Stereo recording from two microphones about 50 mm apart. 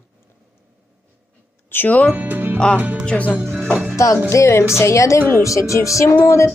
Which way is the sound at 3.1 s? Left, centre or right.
Centre.